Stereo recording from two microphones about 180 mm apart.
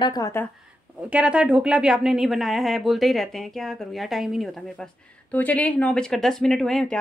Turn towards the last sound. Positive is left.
turn(degrees=5)  # may be behind; listen again after turning